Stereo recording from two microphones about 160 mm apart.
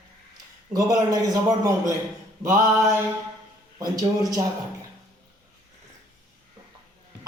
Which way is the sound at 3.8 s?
25° right (ahead or behind).